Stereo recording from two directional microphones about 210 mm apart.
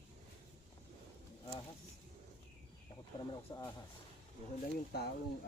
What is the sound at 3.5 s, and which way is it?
Speech, 20° left (ahead or behind).